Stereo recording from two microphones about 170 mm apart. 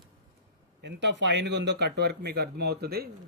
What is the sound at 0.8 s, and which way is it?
Speech, 90° right.